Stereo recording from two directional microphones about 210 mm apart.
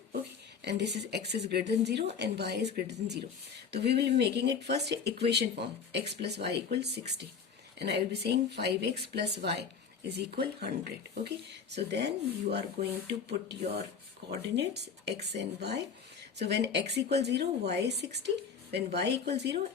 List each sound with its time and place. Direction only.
0.6 s speech: 55° right (ahead or behind)